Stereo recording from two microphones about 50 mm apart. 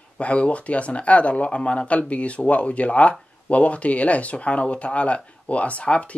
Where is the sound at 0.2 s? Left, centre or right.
Left.